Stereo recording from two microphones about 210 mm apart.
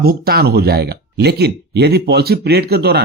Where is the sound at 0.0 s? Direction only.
45° right (ahead or behind).